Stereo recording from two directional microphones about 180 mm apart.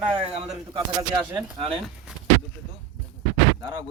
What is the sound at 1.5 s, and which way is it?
Speech, 30° right (ahead or behind).